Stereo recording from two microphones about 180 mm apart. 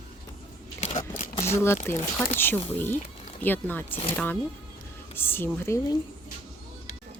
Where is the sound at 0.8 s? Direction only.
40° left (ahead or behind).